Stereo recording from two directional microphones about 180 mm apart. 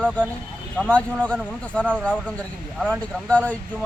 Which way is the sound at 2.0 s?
5° left (ahead or behind).